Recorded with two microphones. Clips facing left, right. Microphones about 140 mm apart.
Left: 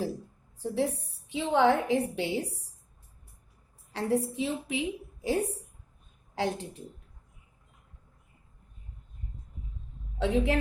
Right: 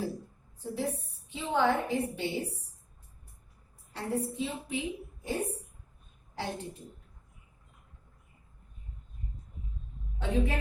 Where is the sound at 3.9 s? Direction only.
90° left.